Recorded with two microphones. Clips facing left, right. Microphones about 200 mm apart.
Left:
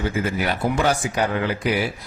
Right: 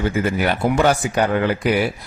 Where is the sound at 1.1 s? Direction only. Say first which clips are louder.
Right 4 dB; 60° right (ahead or behind).